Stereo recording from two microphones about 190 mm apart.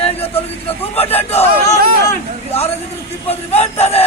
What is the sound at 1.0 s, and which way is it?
Speech, 30° left (ahead or behind).